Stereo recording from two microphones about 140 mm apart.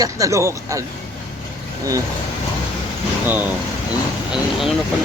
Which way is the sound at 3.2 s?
15° right (ahead or behind).